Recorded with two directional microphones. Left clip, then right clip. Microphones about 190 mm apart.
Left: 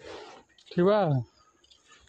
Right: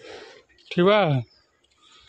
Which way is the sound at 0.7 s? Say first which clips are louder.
Right 5 dB; 10° right (ahead or behind).